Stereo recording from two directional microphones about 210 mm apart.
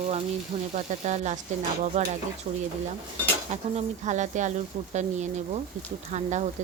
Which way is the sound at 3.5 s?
35° right (ahead or behind).